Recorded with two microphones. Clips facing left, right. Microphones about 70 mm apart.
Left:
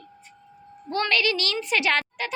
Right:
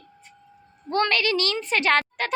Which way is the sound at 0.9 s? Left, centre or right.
Right.